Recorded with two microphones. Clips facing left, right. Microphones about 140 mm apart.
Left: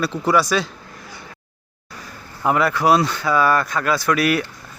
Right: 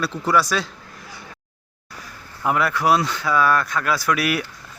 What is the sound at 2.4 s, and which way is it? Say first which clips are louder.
A man's voice: left 2 dB; centre (ahead or behind).